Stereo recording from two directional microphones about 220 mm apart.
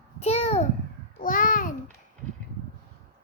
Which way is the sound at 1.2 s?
35° left (ahead or behind).